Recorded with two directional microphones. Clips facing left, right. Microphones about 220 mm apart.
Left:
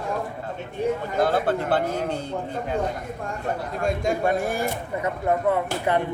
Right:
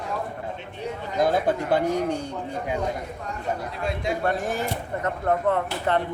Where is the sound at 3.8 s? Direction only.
45° left (ahead or behind).